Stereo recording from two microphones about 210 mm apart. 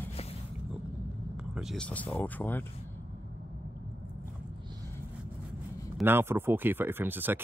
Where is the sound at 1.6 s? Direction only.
Centre (ahead or behind).